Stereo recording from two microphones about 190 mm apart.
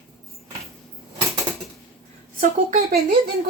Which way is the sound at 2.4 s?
50° right (ahead or behind).